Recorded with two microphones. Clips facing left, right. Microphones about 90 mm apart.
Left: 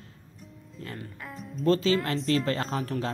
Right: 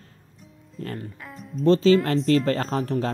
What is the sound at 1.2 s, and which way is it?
Music, centre (ahead or behind).